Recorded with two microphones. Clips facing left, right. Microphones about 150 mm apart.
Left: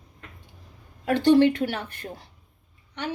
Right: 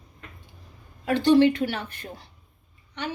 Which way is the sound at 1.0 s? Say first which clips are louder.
Even; 60° left (ahead or behind).